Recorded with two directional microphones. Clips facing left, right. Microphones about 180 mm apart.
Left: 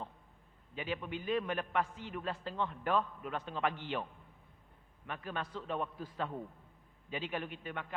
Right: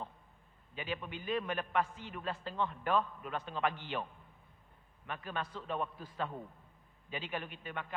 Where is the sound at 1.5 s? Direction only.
15° left (ahead or behind).